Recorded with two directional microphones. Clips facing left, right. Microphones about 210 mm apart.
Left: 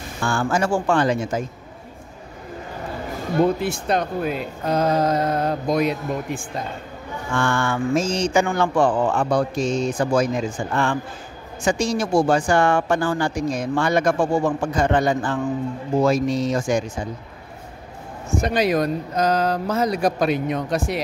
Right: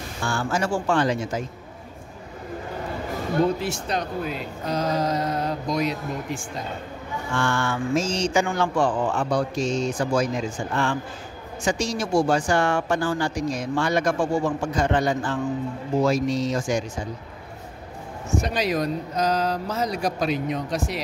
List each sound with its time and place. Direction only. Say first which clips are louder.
0.2 s speech: left 4 dB; 50° left (ahead or behind)
3.6 s speech: left 5 dB; 55° left (ahead or behind)
18.4 s speech: left 6 dB; 55° left (ahead or behind)